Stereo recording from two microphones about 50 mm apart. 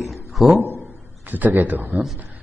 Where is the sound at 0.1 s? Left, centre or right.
Centre.